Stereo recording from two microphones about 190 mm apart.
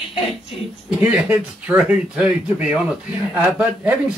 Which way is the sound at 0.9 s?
5° right (ahead or behind).